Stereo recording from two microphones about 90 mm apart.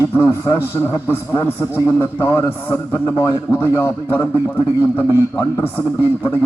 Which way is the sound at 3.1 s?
40° left (ahead or behind).